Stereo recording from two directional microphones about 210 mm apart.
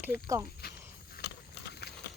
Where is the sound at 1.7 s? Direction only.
50° left (ahead or behind).